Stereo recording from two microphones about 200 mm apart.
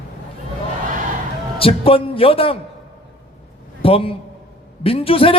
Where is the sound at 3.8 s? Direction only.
30° left (ahead or behind).